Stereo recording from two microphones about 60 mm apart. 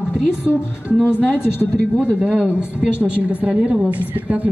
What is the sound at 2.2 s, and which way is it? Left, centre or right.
A woman's voice, right.